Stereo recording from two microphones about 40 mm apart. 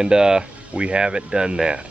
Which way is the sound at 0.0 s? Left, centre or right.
Right.